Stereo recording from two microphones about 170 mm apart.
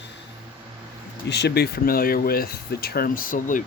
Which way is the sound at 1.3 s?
80° left.